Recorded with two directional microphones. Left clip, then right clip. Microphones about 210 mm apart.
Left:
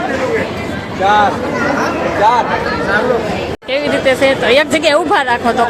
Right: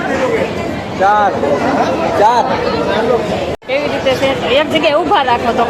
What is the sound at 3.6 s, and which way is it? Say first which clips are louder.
Speech: left 2 dB; 10° left (ahead or behind).